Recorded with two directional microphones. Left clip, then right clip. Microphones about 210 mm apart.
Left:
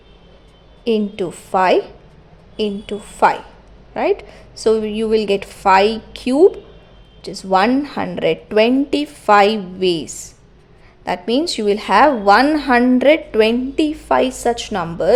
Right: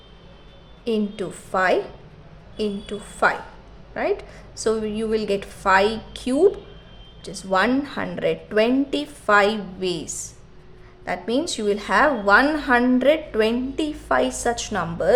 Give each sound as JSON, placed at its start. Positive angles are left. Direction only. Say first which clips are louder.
{"t": 0.9, "sound": "speech", "louder": "left 6 dB", "side_deg": 25}